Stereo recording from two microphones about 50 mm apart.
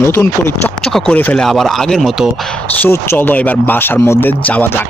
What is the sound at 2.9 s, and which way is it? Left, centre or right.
Speech, left.